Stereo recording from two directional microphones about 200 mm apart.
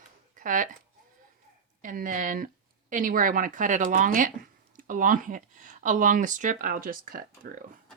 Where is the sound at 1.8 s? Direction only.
40° right (ahead or behind).